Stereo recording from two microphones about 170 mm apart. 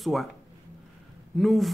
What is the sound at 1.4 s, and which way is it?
Speech, centre (ahead or behind).